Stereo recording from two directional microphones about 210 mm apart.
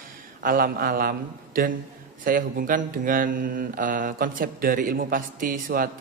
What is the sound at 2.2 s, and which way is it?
Mantra, 40° right (ahead or behind).